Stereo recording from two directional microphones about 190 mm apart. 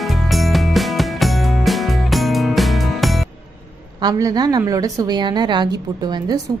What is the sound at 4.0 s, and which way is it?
A woman's voice, 20° right (ahead or behind).